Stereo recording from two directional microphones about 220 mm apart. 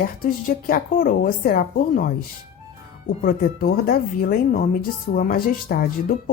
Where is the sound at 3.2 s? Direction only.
40° left (ahead or behind).